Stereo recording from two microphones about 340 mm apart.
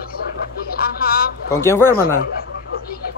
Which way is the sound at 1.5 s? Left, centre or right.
Centre.